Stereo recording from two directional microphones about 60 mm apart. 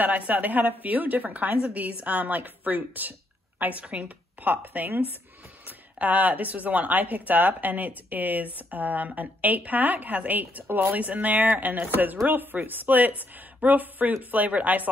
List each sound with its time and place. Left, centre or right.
0.0 s speech: right